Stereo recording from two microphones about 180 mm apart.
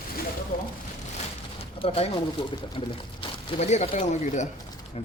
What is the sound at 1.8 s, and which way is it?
Speech, 30° left (ahead or behind).